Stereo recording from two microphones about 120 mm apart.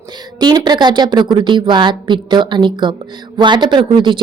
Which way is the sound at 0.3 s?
35° right (ahead or behind).